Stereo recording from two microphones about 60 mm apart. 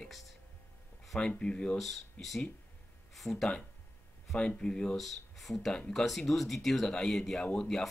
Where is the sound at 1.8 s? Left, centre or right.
Centre.